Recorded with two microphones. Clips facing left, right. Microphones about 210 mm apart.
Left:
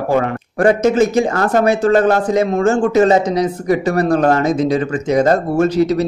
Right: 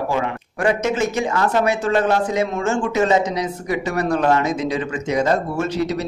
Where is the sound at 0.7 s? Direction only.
35° left (ahead or behind).